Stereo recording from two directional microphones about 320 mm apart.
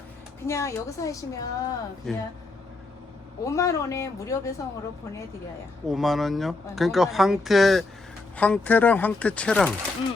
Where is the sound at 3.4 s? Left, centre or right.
Centre.